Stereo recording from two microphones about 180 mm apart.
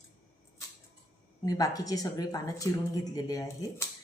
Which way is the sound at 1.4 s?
20° left (ahead or behind).